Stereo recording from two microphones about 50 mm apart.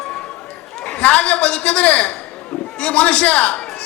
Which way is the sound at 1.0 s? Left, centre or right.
Left.